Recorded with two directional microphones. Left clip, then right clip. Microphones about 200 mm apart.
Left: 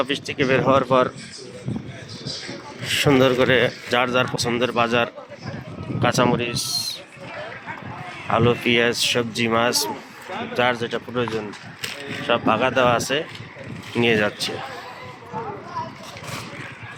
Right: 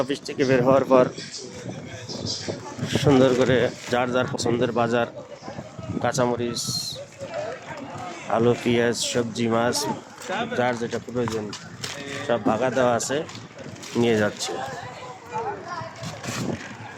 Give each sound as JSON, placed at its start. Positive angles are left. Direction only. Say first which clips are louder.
{"t": 0.0, "sound": "speech", "louder": "left 2 dB", "side_deg": -15}
{"t": 2.8, "sound": "speech", "louder": "left 2 dB", "side_deg": -10}
{"t": 8.3, "sound": "speech", "louder": "left 2 dB", "side_deg": -10}
{"t": 12.3, "sound": "speech", "louder": "left 3 dB", "side_deg": -5}